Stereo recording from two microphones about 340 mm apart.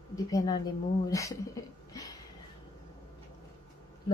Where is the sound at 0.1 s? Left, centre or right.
Centre.